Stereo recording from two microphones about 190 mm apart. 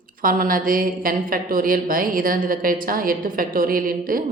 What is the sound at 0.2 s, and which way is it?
A woman's voice, 50° right (ahead or behind).